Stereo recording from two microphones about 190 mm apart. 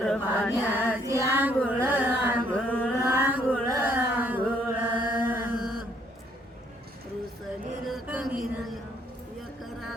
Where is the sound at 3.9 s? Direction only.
10° right (ahead or behind).